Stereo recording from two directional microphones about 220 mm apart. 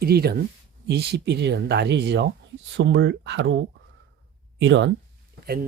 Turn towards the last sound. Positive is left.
turn(degrees=-45)  # may be behind; listen again after turning